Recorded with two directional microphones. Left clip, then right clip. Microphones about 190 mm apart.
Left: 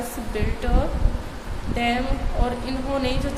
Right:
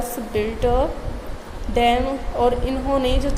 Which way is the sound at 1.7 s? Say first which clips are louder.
Right 6 dB; 30° right (ahead or behind).